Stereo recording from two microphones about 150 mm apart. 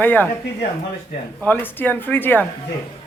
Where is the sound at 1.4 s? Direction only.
10° left (ahead or behind).